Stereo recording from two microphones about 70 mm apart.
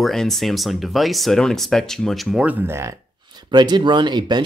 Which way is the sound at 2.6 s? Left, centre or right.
Right.